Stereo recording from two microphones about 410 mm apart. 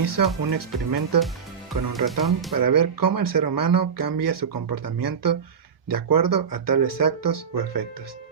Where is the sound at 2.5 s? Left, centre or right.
Right.